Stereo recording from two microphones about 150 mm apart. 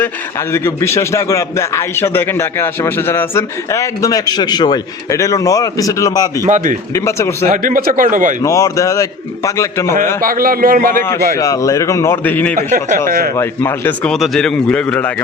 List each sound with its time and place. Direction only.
0.5 s a man's voice: 20° left (ahead or behind)
7.5 s speech: 65° right (ahead or behind)
8.4 s a man's voice: 20° left (ahead or behind)
10.2 s speech: 70° right (ahead or behind)
11.3 s a man's voice: 20° left (ahead or behind)
12.5 s speech: 65° right (ahead or behind)
13.1 s speech: 75° right (ahead or behind)
13.3 s speech: 15° left (ahead or behind)